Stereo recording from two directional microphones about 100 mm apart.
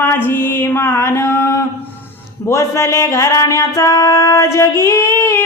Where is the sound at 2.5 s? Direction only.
30° left (ahead or behind).